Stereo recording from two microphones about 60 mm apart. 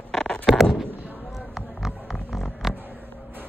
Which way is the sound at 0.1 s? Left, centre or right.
Centre.